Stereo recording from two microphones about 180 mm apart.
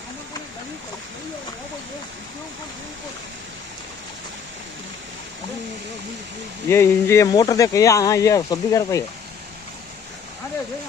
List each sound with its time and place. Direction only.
6.7 s speech: 15° left (ahead or behind)